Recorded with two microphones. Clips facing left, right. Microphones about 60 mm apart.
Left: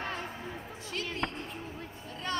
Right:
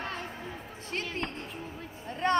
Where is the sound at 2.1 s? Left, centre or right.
Right.